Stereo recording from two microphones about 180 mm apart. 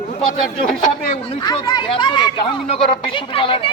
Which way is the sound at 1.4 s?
25° left (ahead or behind).